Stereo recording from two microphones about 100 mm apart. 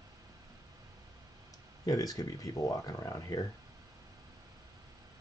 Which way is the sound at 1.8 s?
40° left (ahead or behind).